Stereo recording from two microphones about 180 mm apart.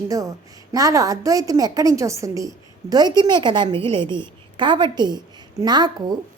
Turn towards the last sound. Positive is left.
turn(degrees=-25)  # may be behind; listen again after turning